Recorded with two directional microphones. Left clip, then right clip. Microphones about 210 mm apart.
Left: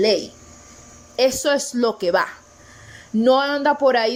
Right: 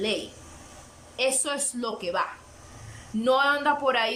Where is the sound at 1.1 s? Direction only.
30° left (ahead or behind).